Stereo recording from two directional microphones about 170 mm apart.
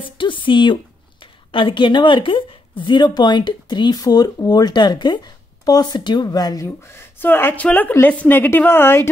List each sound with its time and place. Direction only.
0.2 s a woman's voice: 30° left (ahead or behind); by 9.1 s 15° left (ahead or behind)